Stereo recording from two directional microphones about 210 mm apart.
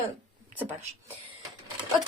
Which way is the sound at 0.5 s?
10° right (ahead or behind).